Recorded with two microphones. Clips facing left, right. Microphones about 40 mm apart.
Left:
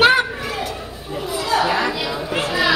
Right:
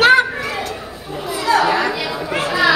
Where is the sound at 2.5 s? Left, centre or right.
Right.